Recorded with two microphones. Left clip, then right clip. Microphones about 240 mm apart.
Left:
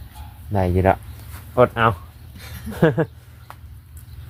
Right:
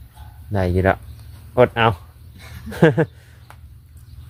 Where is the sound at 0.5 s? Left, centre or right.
Centre.